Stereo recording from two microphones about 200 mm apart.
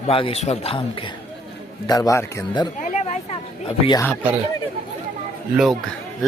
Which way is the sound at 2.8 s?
35° left (ahead or behind).